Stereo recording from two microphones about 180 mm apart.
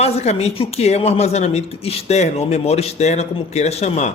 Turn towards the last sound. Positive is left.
turn(degrees=35)  # may be behind; listen again after turning